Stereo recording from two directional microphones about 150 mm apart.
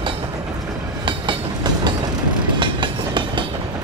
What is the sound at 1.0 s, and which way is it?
Train, 30° right (ahead or behind).